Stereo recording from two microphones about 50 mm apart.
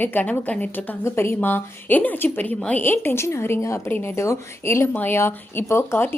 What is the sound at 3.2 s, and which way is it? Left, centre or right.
Speech, left.